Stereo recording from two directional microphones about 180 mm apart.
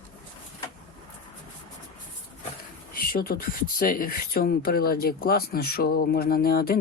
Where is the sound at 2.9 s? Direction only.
55° left (ahead or behind).